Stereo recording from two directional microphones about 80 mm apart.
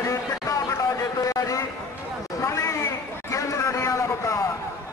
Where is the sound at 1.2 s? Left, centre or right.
Left.